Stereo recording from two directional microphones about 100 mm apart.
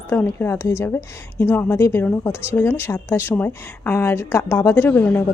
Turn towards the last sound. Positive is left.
turn(degrees=20)  # may be behind; listen again after turning